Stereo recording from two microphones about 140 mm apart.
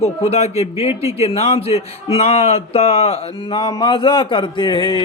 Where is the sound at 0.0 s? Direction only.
50° left (ahead or behind).